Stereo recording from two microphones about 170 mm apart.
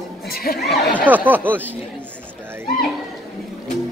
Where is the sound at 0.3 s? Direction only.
65° left (ahead or behind).